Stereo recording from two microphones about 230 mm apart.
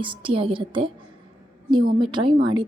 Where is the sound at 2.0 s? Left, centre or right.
Right.